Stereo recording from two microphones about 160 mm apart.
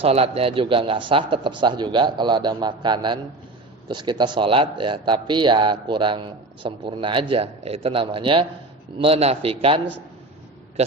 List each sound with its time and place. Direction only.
0.0 s speech: 40° right (ahead or behind)